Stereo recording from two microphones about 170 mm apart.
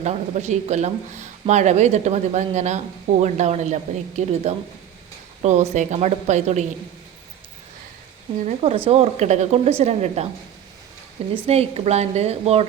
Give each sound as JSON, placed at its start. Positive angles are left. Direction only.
{"t": 0.0, "sound": "speech", "side_deg": -40}
{"t": 8.4, "sound": "speech", "side_deg": -35}
{"t": 11.4, "sound": "speech", "side_deg": -40}